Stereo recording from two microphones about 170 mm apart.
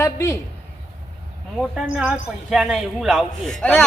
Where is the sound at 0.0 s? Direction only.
15° left (ahead or behind).